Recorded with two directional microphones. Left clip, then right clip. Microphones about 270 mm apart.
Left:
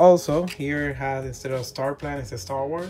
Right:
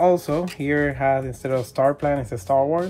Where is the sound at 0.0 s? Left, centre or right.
Centre.